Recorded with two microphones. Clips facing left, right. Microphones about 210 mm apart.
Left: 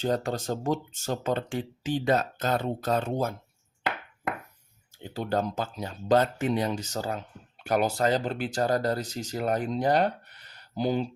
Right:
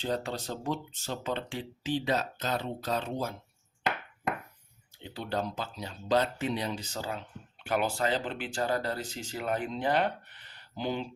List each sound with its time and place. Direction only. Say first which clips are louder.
0.0 s speech: left 5 dB; 45° left (ahead or behind)
5.0 s speech: left 5 dB; 45° left (ahead or behind)